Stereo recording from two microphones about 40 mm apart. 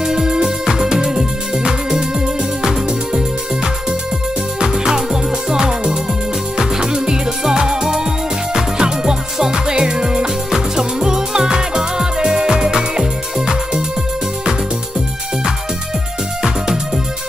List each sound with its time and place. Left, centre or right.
0.0 s music: centre
16.4 s music: centre